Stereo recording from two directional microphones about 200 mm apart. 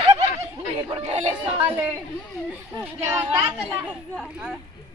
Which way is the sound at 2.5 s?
10° right (ahead or behind).